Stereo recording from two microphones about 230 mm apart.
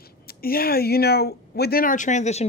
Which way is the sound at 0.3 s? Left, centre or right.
Left.